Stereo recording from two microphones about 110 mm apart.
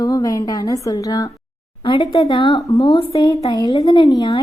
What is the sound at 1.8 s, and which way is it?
A woman's voice, 45° left (ahead or behind).